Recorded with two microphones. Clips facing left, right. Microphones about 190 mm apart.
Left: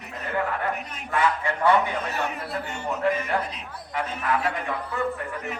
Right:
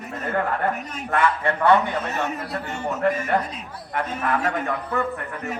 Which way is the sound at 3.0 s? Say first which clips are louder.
Right 3 dB; 50° right (ahead or behind).